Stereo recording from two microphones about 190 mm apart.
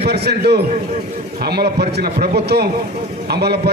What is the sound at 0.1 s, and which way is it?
A man's voice, 60° right (ahead or behind).